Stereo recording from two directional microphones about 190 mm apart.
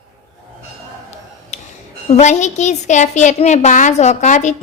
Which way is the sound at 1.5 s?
40° left (ahead or behind).